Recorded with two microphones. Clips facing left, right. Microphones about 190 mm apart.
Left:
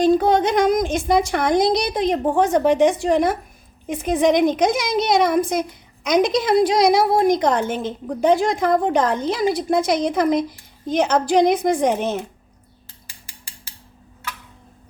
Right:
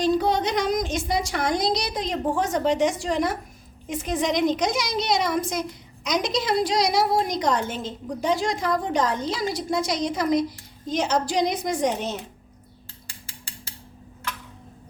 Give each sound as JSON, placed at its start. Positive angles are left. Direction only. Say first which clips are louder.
{"t": 0.0, "sound": "a woman's voice", "louder": "left 6 dB", "side_deg": 50}